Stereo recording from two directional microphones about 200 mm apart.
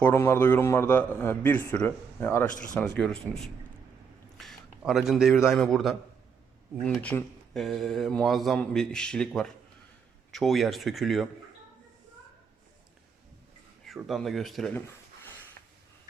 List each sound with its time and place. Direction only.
0.0 s a man's voice: 10° left (ahead or behind)
13.8 s speech: centre (ahead or behind)